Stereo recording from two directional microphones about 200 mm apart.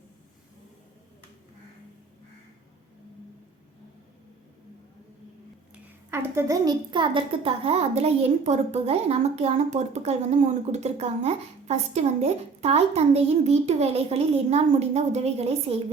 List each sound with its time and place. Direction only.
5.7 s a woman's voice: 10° right (ahead or behind); by 15.8 s 30° right (ahead or behind)